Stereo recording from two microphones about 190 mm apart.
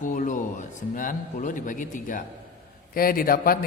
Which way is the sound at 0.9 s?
45° left (ahead or behind).